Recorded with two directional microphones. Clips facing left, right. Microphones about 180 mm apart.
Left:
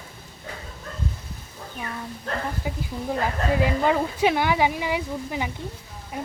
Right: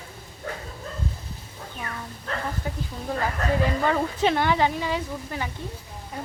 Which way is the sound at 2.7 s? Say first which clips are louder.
Left 2 dB; 10° left (ahead or behind).